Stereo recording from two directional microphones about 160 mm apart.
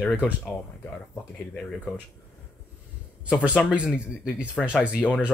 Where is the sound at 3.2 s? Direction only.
5° right (ahead or behind).